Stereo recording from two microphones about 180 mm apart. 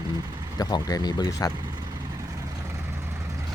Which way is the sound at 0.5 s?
20° left (ahead or behind).